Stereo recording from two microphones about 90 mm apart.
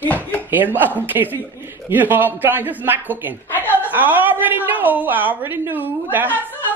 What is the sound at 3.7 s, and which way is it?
A woman's voice, 20° right (ahead or behind).